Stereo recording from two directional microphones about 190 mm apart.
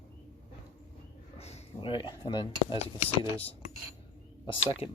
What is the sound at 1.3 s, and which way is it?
Speech, 35° left (ahead or behind).